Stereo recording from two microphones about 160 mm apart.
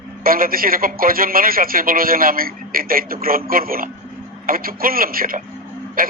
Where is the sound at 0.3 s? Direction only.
65° right (ahead or behind).